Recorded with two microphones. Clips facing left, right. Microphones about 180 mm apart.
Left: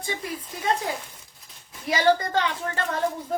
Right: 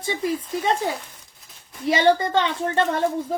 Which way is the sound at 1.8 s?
25° right (ahead or behind).